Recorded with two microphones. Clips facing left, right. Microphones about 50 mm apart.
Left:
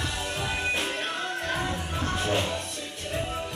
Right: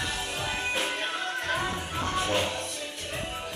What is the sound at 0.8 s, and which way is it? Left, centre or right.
Music, centre.